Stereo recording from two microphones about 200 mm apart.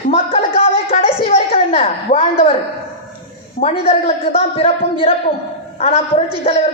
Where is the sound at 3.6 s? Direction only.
30° left (ahead or behind).